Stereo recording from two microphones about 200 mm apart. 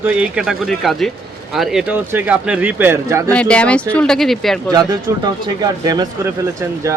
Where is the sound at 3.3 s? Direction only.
5° left (ahead or behind).